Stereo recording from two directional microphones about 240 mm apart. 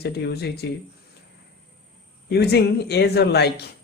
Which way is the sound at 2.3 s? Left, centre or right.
Left.